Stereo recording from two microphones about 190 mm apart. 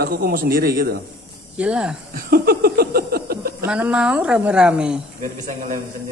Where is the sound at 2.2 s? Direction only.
50° right (ahead or behind).